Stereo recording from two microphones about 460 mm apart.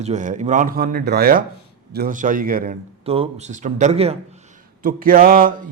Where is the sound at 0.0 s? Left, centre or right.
Centre.